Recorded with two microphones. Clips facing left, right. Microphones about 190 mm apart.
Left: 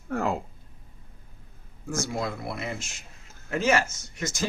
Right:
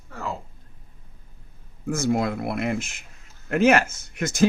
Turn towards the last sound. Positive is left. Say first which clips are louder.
# right 5 dB
turn(degrees=-60)  # may be behind; listen again after turning